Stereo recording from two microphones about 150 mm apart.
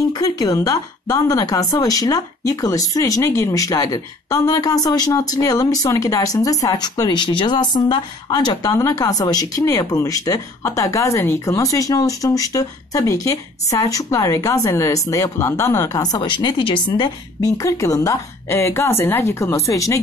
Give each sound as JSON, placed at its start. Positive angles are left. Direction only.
{"t": 0.1, "sound": "a woman's voice", "side_deg": 25}
{"t": 17.6, "sound": "a woman's voice", "side_deg": 20}